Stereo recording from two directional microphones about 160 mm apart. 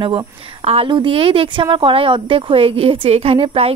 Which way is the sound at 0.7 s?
35° right (ahead or behind).